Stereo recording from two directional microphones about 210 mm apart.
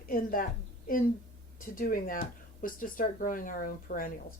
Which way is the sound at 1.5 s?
40° left (ahead or behind).